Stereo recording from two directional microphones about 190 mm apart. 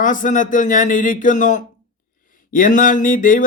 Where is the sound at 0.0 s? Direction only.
45° left (ahead or behind).